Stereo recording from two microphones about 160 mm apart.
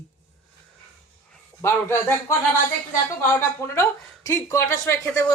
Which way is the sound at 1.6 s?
15° left (ahead or behind).